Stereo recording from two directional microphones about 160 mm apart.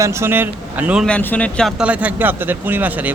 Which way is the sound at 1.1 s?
10° left (ahead or behind).